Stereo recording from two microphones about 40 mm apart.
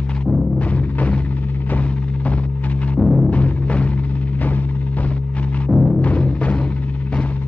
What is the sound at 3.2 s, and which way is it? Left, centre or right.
Music, left.